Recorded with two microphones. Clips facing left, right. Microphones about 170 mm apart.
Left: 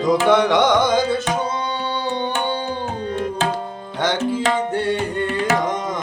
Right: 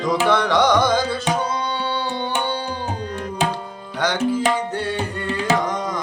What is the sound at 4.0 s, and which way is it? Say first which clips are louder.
Tabla: even; 25° left (ahead or behind).